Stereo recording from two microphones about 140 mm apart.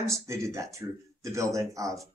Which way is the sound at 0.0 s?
20° right (ahead or behind).